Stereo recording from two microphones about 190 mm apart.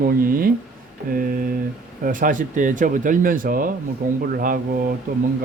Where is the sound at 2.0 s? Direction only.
45° right (ahead or behind).